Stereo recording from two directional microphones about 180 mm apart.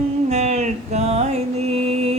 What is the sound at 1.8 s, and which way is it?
Music, 35° right (ahead or behind).